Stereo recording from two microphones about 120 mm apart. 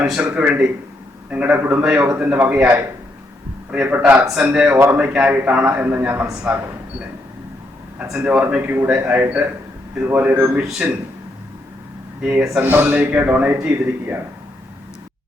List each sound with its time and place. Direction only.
0.0 s a man's voice: 5° right (ahead or behind)
8.1 s a man's voice: 10° right (ahead or behind)
12.2 s a man's voice: 10° right (ahead or behind)